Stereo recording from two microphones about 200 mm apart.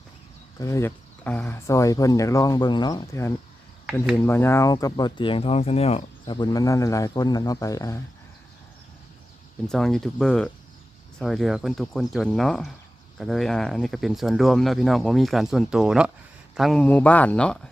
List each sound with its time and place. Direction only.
0.6 s speech: 15° left (ahead or behind)
3.8 s speech: centre (ahead or behind)
4.2 s speech: 10° left (ahead or behind)
9.6 s speech: centre (ahead or behind)